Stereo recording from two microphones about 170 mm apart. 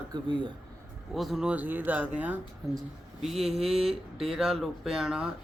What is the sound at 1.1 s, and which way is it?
Speech, centre (ahead or behind).